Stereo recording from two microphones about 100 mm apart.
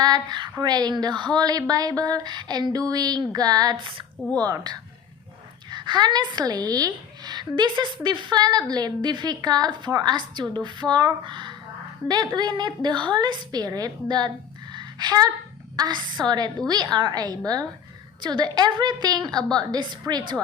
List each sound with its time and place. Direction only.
0.0 s a woman's voice: 45° right (ahead or behind)
3.8 s speech: 55° right (ahead or behind)
4.4 s a woman's voice: 40° right (ahead or behind)
14.7 s a sound: 45° right (ahead or behind)
15.7 s a woman's voice: 45° right (ahead or behind)